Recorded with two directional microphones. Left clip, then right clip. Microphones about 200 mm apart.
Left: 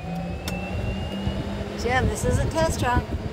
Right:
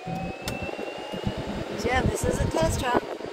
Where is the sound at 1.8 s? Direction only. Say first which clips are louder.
Left 2 dB; 35° left (ahead or behind).